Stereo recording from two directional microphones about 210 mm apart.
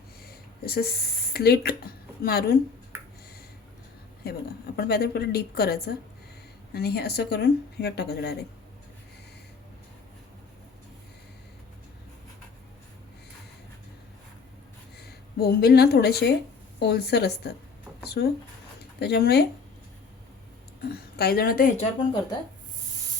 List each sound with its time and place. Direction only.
0.3 s a sound: 45° left (ahead or behind)
2.2 s speech: 50° left (ahead or behind)
4.2 s speech: 45° left (ahead or behind)
14.9 s speech: 50° left (ahead or behind)
20.9 s speech: 50° left (ahead or behind)